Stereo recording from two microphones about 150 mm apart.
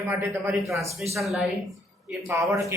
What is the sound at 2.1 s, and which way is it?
Speech, 15° right (ahead or behind).